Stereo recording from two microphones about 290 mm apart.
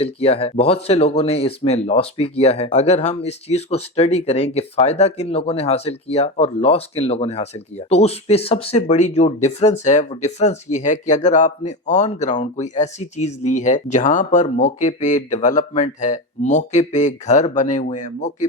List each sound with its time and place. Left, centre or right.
0.0 s speech: centre